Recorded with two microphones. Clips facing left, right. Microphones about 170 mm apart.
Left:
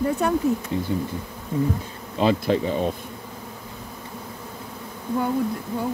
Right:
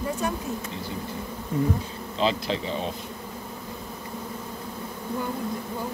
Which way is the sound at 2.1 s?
55° left (ahead or behind).